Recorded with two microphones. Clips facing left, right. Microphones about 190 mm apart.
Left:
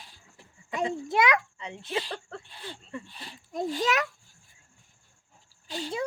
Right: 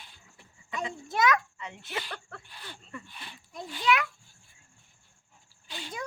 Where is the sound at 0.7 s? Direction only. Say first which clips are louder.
Left 5 dB; 35° left (ahead or behind).